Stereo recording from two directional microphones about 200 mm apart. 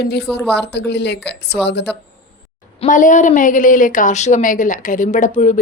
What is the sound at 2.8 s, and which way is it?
Speech, 40° left (ahead or behind).